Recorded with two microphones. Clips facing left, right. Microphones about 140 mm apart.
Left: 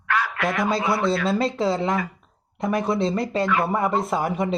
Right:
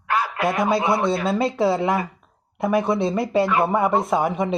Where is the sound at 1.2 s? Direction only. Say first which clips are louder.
Right 2 dB; centre (ahead or behind).